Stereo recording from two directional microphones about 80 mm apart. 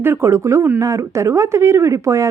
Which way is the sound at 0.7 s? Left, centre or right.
Right.